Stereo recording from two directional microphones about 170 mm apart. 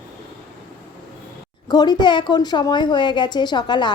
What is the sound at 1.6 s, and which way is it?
A woman's voice, 25° left (ahead or behind).